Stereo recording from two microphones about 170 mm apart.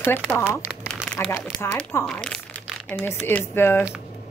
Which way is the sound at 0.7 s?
5° left (ahead or behind).